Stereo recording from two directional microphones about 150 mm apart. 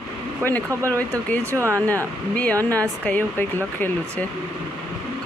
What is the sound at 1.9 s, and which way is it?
Speech, 10° left (ahead or behind).